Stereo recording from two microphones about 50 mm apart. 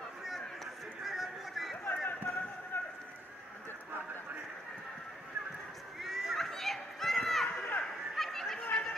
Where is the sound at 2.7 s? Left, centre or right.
Left.